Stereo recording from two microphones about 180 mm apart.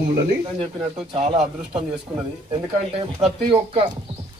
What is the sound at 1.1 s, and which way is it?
Speech, 25° right (ahead or behind).